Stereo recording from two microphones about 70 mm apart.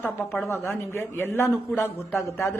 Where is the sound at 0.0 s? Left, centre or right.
Left.